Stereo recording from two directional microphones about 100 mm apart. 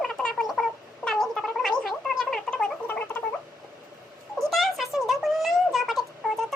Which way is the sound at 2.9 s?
20° left (ahead or behind).